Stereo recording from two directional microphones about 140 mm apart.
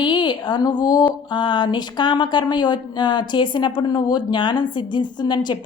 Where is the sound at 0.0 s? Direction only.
35° left (ahead or behind).